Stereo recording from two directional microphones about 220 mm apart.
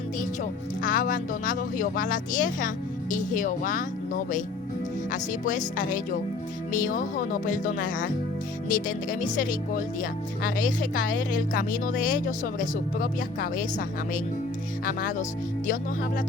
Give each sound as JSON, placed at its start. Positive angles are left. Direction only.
{"t": 0.8, "sound": "speech", "side_deg": 40}
{"t": 5.1, "sound": "speech", "side_deg": 35}